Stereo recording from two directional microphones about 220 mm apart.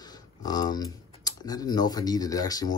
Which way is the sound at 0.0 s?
15° left (ahead or behind).